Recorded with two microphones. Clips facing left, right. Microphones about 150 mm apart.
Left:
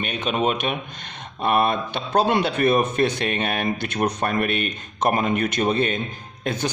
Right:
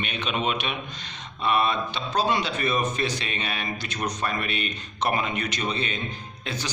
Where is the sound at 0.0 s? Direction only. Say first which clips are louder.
Left 5 dB; 45° left (ahead or behind).